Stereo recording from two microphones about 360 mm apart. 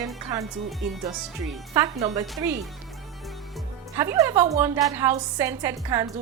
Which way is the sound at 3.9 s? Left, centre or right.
Centre.